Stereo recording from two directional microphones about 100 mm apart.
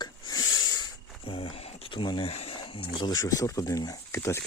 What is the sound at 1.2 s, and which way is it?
Speech, 70° left (ahead or behind).